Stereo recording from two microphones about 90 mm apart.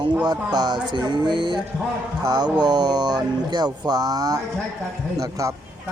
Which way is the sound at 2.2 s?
45° right (ahead or behind).